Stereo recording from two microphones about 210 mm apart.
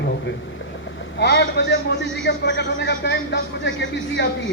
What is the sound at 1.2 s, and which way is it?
A man's voice, 55° left (ahead or behind).